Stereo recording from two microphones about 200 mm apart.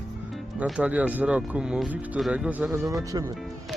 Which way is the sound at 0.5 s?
5° right (ahead or behind).